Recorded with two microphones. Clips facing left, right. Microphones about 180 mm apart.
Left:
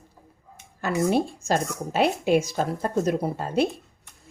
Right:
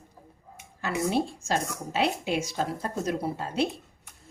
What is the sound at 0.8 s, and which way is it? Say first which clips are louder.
Speech: left 4 dB; 45° left (ahead or behind).